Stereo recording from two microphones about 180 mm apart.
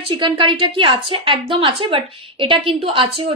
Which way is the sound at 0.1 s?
30° right (ahead or behind).